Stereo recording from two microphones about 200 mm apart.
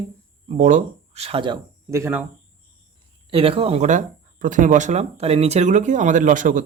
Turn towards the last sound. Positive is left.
turn(degrees=-40)  # may be behind; listen again after turning